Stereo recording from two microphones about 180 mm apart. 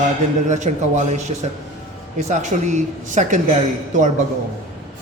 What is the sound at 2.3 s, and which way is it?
Speech, 40° right (ahead or behind).